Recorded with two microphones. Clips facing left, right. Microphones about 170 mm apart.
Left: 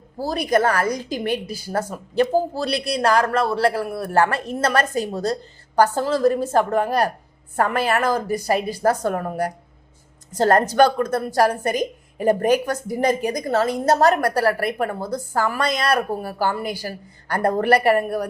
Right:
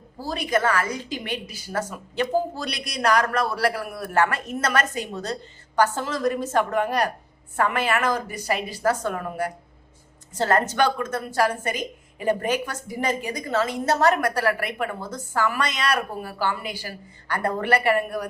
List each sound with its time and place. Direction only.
0.2 s a woman's voice: 35° left (ahead or behind)